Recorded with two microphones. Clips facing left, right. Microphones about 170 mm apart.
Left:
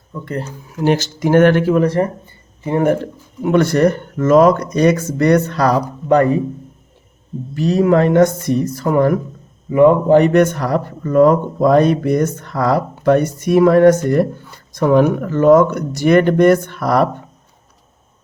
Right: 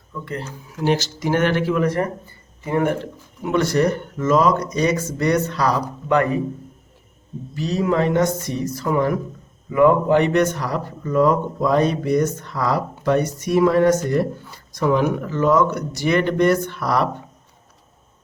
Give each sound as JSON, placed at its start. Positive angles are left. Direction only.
{"t": 0.1, "sound": "speech", "side_deg": 40}
{"t": 0.9, "sound": "speech", "side_deg": 55}
{"t": 1.7, "sound": "speech", "side_deg": 30}
{"t": 3.4, "sound": "speech", "side_deg": 55}
{"t": 6.1, "sound": "speech", "side_deg": 35}
{"t": 7.5, "sound": "speech", "side_deg": 55}
{"t": 9.6, "sound": "a man's voice", "side_deg": 30}
{"t": 10.2, "sound": "speech", "side_deg": 50}